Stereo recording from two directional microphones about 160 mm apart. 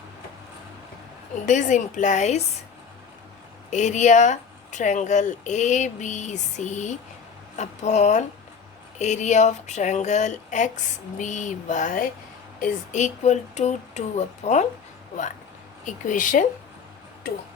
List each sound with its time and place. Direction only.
1.5 s speech: 50° left (ahead or behind)
3.7 s speech: 50° left (ahead or behind)
15.9 s speech: 55° left (ahead or behind)